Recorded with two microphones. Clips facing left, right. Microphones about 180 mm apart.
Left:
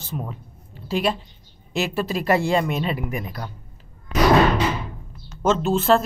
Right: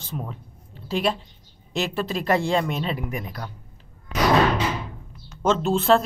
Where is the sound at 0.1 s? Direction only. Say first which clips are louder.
Left 2 dB; 5° left (ahead or behind).